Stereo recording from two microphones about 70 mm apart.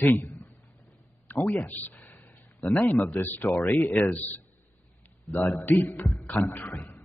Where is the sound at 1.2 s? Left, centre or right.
Left.